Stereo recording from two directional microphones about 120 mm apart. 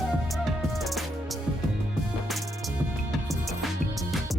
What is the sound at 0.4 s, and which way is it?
Music, centre (ahead or behind).